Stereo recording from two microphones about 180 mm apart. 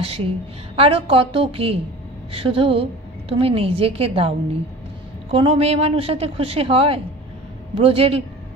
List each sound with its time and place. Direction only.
0.0 s a woman's voice: 35° right (ahead or behind)